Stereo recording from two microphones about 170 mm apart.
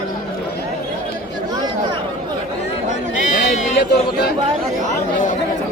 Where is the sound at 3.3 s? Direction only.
50° left (ahead or behind).